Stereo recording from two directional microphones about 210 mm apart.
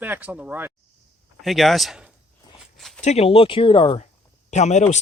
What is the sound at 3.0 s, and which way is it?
Speech, 30° left (ahead or behind).